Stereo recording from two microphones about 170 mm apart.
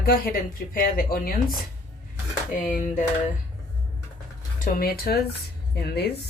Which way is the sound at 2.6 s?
50° left (ahead or behind).